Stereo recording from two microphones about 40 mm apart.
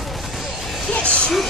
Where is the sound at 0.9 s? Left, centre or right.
Left.